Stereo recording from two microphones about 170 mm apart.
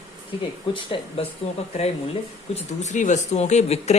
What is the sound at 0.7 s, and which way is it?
Speech, 30° left (ahead or behind).